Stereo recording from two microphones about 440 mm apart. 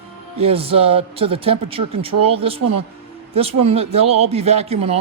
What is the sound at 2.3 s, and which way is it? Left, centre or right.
Speech, centre.